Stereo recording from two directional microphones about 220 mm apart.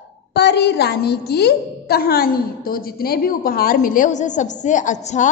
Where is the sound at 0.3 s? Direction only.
50° left (ahead or behind).